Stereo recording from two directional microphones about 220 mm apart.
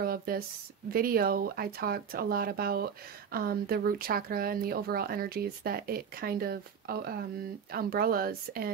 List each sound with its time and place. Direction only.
0.0 s speech: 45° right (ahead or behind)